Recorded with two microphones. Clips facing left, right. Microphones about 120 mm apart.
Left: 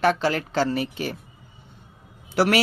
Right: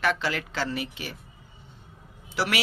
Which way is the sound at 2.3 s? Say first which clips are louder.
Left 8 dB; 50° left (ahead or behind).